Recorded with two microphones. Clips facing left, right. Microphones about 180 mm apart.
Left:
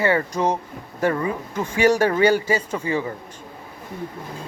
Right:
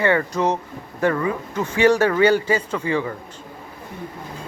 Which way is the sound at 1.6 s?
10° left (ahead or behind).